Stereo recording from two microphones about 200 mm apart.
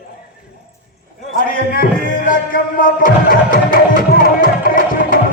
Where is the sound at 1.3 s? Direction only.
45° left (ahead or behind).